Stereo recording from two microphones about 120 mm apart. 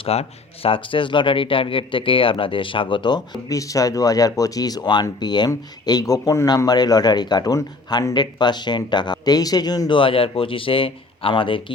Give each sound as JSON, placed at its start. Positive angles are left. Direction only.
{"t": 0.0, "sound": "speech", "side_deg": 55}
{"t": 3.5, "sound": "speech", "side_deg": 30}
{"t": 10.0, "sound": "speech", "side_deg": 45}